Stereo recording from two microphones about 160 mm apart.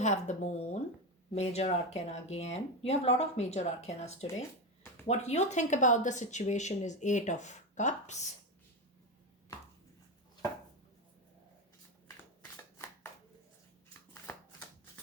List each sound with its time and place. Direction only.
0.0 s speech: 45° left (ahead or behind)
14.1 s shuffling cards: 15° left (ahead or behind)